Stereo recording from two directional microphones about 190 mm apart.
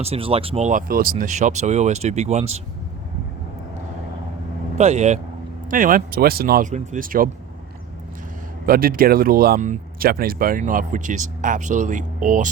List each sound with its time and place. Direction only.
0.0 s speech: 30° right (ahead or behind)
4.8 s speech: 35° right (ahead or behind)
8.6 s speech: 50° right (ahead or behind)